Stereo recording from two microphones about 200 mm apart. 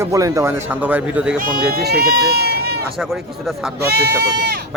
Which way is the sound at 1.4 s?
50° right (ahead or behind).